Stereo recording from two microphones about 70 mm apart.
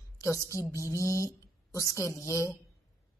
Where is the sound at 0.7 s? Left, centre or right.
Left.